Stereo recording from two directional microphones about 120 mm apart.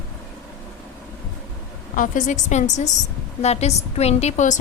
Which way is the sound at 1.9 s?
90° left.